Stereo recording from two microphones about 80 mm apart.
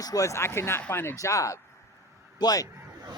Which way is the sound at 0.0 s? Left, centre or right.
Left.